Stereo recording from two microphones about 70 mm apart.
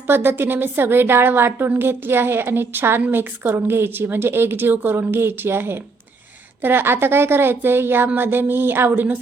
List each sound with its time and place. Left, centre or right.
0.1 s a woman's voice: right